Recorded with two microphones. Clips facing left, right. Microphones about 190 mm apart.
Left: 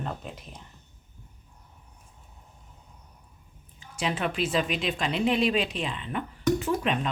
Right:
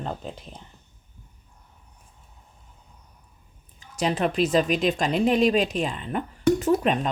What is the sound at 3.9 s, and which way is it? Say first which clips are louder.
Speech: right 5 dB; 40° right (ahead or behind).